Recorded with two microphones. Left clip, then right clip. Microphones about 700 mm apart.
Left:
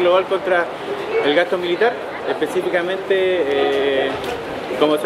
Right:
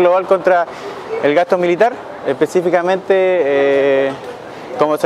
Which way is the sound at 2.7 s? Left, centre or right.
Right.